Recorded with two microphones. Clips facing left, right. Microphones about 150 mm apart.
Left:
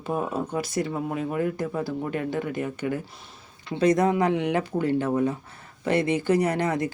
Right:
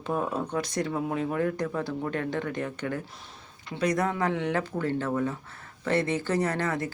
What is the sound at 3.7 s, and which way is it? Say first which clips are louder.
Speech: left 6 dB; 20° left (ahead or behind).